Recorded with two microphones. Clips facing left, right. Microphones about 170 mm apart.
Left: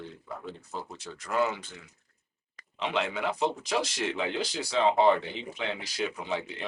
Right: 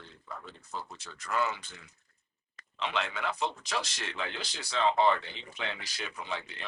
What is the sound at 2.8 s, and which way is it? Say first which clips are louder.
Speech: left 4 dB; 10° left (ahead or behind).